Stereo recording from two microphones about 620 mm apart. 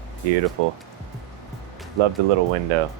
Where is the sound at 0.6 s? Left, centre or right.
Right.